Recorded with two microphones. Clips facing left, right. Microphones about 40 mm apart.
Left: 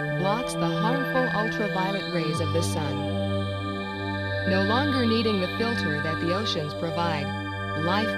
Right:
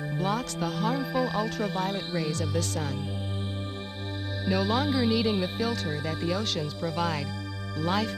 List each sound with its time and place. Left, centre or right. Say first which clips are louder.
0.2 s speech: left 2 dB; centre
0.9 s speech: left 4 dB; left
1.3 s speech: left 3 dB; centre
4.5 s speech: left 2 dB; centre